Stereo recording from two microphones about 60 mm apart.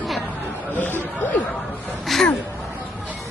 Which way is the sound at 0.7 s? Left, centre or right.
Left.